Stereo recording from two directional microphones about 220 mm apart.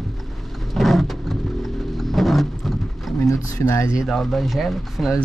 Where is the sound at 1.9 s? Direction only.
Centre (ahead or behind).